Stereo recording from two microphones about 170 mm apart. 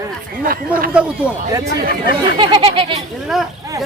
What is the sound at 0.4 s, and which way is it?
Speech, 60° right (ahead or behind).